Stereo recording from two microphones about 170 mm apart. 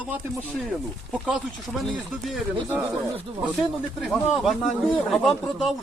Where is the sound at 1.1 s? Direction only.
5° right (ahead or behind).